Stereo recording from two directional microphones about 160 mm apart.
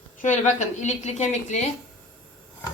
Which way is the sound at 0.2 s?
50° left (ahead or behind).